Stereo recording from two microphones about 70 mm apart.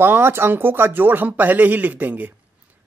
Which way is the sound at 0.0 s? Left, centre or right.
Right.